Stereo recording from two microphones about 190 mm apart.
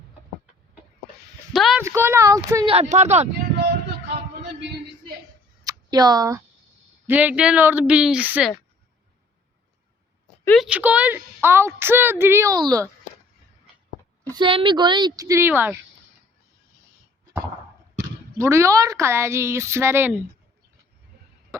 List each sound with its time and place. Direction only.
1.5 s a woman's voice: centre (ahead or behind)
1.8 s a woman's voice: 15° right (ahead or behind)
2.7 s speech: 35° right (ahead or behind)
5.6 s a sound: 20° right (ahead or behind)
7.1 s a woman's voice: 10° right (ahead or behind)
10.4 s speech: 5° left (ahead or behind)
10.7 s a woman's voice: 5° right (ahead or behind)
14.3 s a woman's voice: 25° right (ahead or behind); by 15.8 s 10° right (ahead or behind)
18.3 s a woman's voice: 15° right (ahead or behind)